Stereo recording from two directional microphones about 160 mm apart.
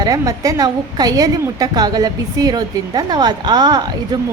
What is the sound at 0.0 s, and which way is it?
A woman's voice, 20° right (ahead or behind).